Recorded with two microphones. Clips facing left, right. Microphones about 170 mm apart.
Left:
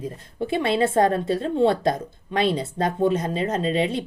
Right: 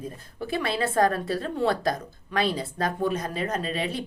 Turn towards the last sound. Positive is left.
turn(degrees=25)  # may be behind; listen again after turning